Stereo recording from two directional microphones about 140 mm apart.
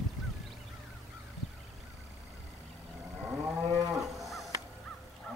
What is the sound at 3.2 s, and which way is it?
Moo, 15° right (ahead or behind).